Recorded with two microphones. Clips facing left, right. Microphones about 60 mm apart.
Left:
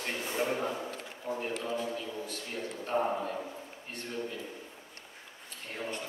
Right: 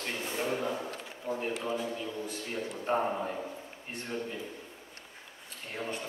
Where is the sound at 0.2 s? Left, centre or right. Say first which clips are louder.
Left 1 dB; centre.